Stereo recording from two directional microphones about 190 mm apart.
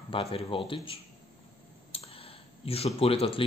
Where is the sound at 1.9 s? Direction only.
30° left (ahead or behind).